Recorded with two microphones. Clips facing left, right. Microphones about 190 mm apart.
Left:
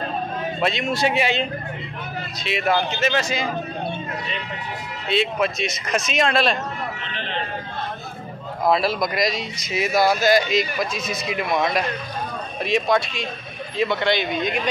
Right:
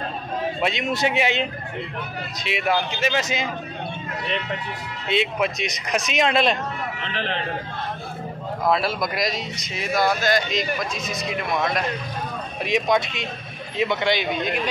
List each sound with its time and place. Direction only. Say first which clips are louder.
0.6 s speech: left 3 dB; 15° right (ahead or behind)
2.7 s speech: left 2 dB; 10° right (ahead or behind)
5.1 s speech: left 1 dB; 15° right (ahead or behind)
8.6 s speech: left 2 dB; centre (ahead or behind)
12.6 s speech: left 1 dB; 15° right (ahead or behind)